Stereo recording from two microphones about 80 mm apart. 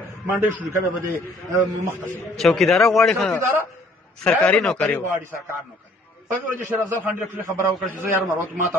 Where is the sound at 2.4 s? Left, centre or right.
Centre.